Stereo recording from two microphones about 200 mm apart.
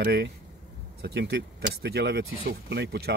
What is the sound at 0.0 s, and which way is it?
Speech, 55° right (ahead or behind).